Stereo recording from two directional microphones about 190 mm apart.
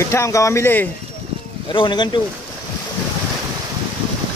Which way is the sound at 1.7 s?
25° left (ahead or behind).